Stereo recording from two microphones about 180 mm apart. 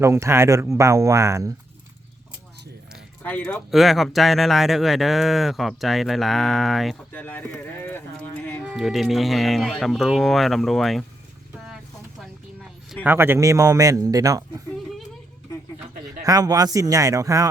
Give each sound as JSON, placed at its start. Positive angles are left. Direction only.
{"t": 0.0, "sound": "speech", "side_deg": -15}
{"t": 3.2, "sound": "speech", "side_deg": 10}
{"t": 7.1, "sound": "speech", "side_deg": 10}
{"t": 8.6, "sound": "speech", "side_deg": 0}
{"t": 13.1, "sound": "a man's voice", "side_deg": -15}
{"t": 16.0, "sound": "a man's voice", "side_deg": -20}